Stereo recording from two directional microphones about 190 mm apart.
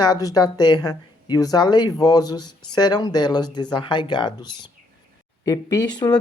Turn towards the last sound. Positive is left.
turn(degrees=20)  # may be behind; listen again after turning